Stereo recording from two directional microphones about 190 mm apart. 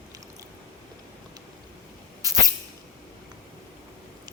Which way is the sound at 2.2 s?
20° right (ahead or behind).